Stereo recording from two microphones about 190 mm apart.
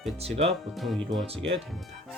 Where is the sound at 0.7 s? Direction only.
Centre (ahead or behind).